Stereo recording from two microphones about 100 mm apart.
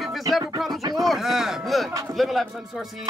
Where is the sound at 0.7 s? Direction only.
40° right (ahead or behind).